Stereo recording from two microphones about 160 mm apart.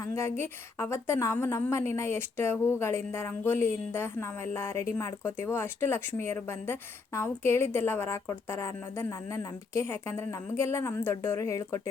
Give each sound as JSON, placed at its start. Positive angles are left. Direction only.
{"t": 0.0, "sound": "a woman's voice", "side_deg": 15}